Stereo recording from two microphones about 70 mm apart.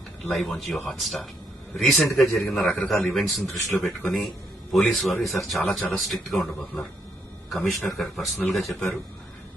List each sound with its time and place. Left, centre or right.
0.3 s a man's voice: centre